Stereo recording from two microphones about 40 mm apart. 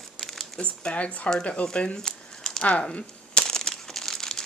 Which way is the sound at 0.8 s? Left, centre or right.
Left.